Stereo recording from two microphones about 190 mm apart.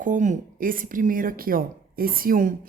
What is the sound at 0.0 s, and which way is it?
Speech, 40° right (ahead or behind).